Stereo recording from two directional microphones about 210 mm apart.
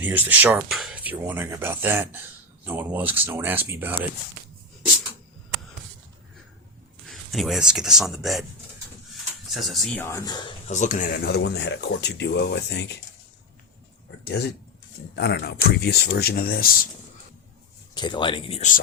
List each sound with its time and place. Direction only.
0.0 s speech: 10° right (ahead or behind)
7.0 s speech: centre (ahead or behind)
9.5 s speech: centre (ahead or behind); by 10.5 s 20° left (ahead or behind)
10.7 s speech: 35° left (ahead or behind); by 12.8 s 55° left (ahead or behind)
15.1 s speech: 50° left (ahead or behind)
17.9 s speech: 20° left (ahead or behind)